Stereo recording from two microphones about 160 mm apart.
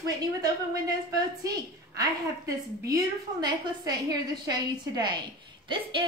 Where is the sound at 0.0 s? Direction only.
25° right (ahead or behind).